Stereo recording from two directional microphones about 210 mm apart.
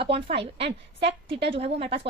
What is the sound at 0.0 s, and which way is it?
A woman's voice, 25° right (ahead or behind).